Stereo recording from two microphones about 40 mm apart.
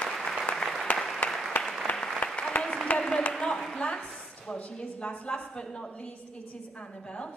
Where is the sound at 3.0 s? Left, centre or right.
Centre.